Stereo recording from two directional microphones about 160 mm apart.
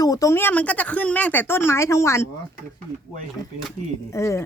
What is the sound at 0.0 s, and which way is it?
Speech, 20° left (ahead or behind).